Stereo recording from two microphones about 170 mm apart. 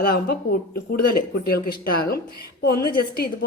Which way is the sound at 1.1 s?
60° left (ahead or behind).